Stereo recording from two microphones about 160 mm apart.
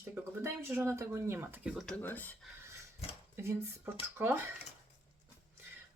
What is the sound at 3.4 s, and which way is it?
Speech, 15° right (ahead or behind).